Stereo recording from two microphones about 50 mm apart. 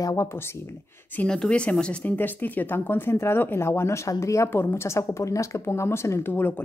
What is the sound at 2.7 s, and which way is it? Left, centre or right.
Speech, left.